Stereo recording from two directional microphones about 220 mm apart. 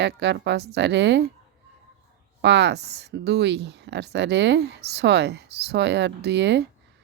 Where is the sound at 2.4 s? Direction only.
50° right (ahead or behind).